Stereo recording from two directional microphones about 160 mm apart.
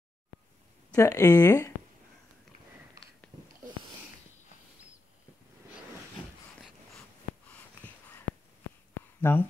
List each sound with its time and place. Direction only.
0.9 s speech: 20° left (ahead or behind)
9.2 s speech: 10° left (ahead or behind)